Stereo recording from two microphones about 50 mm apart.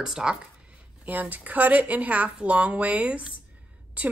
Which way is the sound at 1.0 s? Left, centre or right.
Right.